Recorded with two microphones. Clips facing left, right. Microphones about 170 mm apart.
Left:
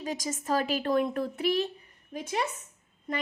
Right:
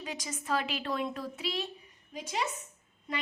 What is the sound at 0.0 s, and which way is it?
A woman's voice, 45° left (ahead or behind).